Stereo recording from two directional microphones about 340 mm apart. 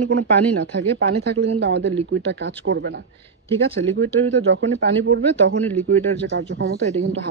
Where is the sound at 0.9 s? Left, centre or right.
Right.